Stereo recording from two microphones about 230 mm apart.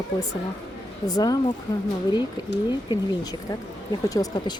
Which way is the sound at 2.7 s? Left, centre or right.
Centre.